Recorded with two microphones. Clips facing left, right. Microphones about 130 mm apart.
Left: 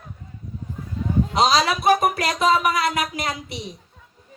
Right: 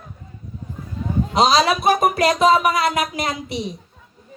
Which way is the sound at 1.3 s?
20° right (ahead or behind).